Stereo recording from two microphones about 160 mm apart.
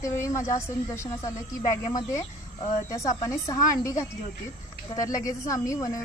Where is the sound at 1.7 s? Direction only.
25° left (ahead or behind).